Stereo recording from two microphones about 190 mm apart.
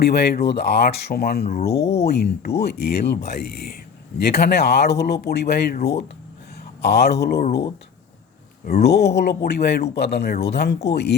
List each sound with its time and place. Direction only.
0.0 s speech: 60° left (ahead or behind)
8.6 s speech: 55° left (ahead or behind)